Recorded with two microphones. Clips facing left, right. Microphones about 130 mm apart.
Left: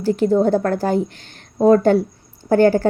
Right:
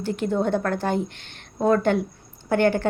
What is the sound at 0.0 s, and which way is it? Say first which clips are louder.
A woman's voice: left 8 dB; 35° left (ahead or behind).